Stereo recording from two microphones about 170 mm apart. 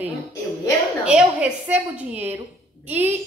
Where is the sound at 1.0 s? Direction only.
5° right (ahead or behind).